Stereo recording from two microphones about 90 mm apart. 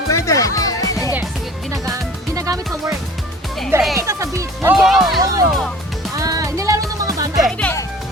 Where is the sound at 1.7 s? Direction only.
35° right (ahead or behind).